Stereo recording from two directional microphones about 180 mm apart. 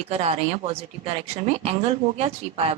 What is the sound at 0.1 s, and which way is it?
A woman's voice, 35° right (ahead or behind).